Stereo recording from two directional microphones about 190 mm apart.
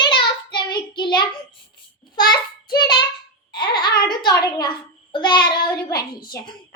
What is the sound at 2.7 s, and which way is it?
Child singing, 25° left (ahead or behind).